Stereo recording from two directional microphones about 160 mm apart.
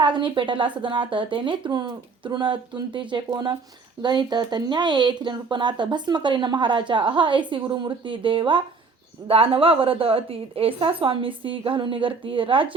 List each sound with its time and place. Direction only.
0.0 s a woman's voice: 30° right (ahead or behind)